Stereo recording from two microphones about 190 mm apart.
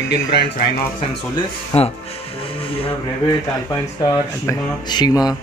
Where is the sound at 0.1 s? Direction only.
60° left (ahead or behind).